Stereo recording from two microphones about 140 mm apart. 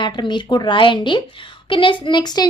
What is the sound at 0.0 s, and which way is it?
A child's voice, 35° left (ahead or behind).